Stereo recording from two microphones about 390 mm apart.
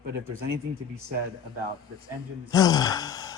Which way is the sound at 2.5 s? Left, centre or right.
Centre.